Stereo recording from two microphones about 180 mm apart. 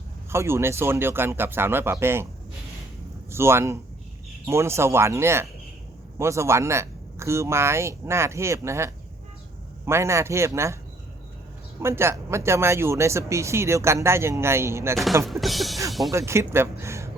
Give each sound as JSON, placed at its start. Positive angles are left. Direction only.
{"t": 0.3, "sound": "speech", "side_deg": -15}
{"t": 3.3, "sound": "speech", "side_deg": -15}
{"t": 11.8, "sound": "speech", "side_deg": -15}
{"t": 15.2, "sound": "music", "side_deg": 0}
{"t": 16.1, "sound": "speech", "side_deg": -15}